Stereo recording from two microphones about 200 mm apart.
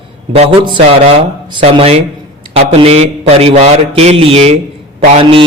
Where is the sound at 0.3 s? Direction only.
25° right (ahead or behind).